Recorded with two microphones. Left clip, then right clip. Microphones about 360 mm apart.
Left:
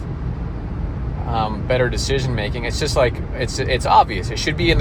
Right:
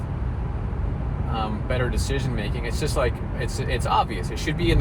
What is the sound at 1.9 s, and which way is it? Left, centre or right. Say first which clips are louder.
Speech: left 7 dB; left.